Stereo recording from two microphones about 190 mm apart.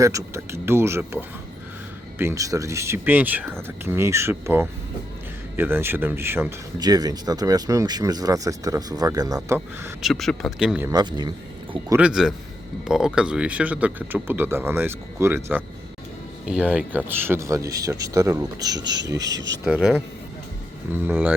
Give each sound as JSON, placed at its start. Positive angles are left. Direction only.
{"t": 0.0, "sound": "speech", "side_deg": -15}
{"t": 10.0, "sound": "speech", "side_deg": 0}
{"t": 10.9, "sound": "speech", "side_deg": -20}
{"t": 11.9, "sound": "speech", "side_deg": -5}
{"t": 19.6, "sound": "speech", "side_deg": -5}